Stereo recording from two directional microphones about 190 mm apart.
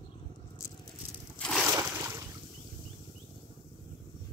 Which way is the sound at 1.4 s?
Centre (ahead or behind).